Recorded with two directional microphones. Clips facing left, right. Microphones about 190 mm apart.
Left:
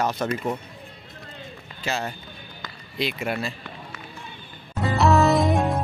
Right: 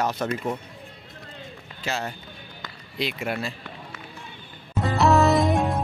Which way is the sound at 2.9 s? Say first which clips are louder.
Left 1 dB; centre (ahead or behind).